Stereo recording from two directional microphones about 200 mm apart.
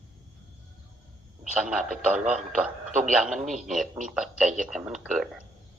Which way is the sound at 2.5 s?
40° right (ahead or behind).